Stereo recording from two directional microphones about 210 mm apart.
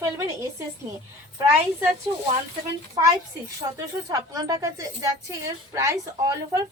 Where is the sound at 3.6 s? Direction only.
15° right (ahead or behind).